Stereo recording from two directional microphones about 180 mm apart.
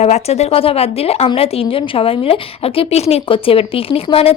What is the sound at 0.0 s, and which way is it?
A woman's voice, 35° left (ahead or behind).